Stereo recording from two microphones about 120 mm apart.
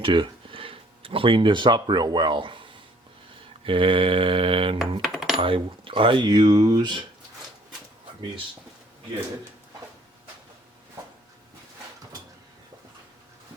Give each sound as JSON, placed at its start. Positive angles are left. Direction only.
{"t": 0.0, "sound": "speech", "side_deg": -45}
{"t": 3.7, "sound": "mantra", "side_deg": -45}
{"t": 5.0, "sound": "coin", "side_deg": -5}
{"t": 5.4, "sound": "speech", "side_deg": -50}